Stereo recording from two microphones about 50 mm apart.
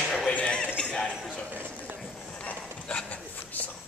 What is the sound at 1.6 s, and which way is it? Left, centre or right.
Speech, right.